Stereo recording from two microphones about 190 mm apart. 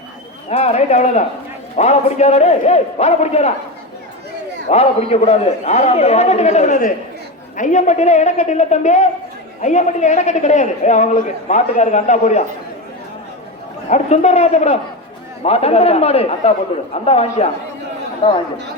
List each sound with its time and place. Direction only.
0.5 s a man's voice: 35° left (ahead or behind)
4.7 s a man's voice: 35° left (ahead or behind)
13.9 s a man's voice: 35° left (ahead or behind)